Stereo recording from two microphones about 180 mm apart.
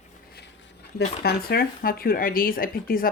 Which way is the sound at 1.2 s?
55° left (ahead or behind).